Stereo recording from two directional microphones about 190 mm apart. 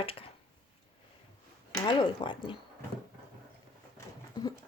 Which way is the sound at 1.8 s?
25° left (ahead or behind).